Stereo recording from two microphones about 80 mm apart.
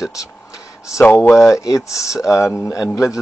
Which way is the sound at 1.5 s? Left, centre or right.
Left.